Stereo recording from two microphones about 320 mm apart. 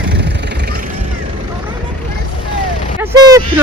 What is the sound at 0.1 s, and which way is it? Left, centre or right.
Vehicle, right.